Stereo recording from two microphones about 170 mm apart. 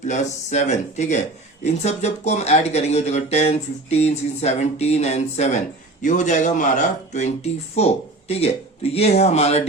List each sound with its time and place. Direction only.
0.1 s speech: 45° left (ahead or behind)